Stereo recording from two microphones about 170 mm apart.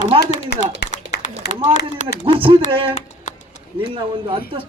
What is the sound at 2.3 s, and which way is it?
Speech, 30° right (ahead or behind).